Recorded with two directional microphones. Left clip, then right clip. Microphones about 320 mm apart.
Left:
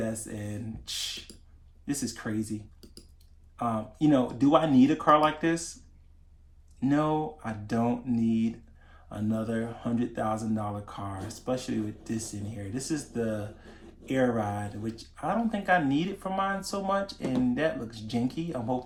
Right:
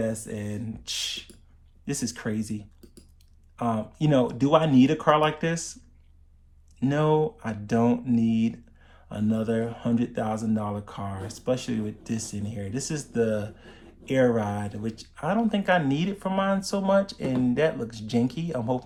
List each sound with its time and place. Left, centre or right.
0.1 s speech: right
3.6 s speech: right
6.7 s speech: right
12.0 s speech: right